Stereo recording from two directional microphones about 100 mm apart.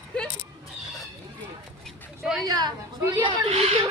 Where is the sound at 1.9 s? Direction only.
Centre (ahead or behind).